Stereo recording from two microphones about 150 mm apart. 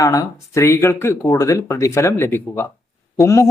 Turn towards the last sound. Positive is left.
turn(degrees=20)  # may be behind; listen again after turning